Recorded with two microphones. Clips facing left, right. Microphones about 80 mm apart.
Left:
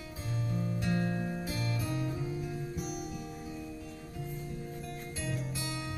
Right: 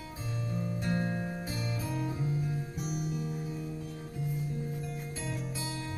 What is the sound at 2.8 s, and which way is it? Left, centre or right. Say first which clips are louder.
Music: right 3 dB; right.